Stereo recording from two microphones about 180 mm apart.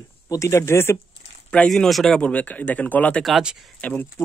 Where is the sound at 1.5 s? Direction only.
5° left (ahead or behind).